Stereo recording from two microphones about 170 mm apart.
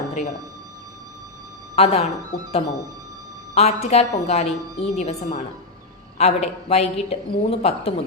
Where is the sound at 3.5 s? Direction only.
40° left (ahead or behind).